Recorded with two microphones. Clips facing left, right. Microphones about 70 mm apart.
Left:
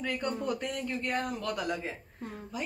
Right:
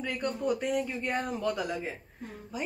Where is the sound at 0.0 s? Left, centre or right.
Centre.